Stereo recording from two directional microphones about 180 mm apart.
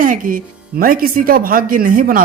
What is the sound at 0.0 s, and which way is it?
Speech, 50° right (ahead or behind).